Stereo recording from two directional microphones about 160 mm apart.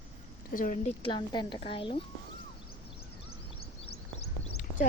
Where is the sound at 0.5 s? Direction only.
55° left (ahead or behind).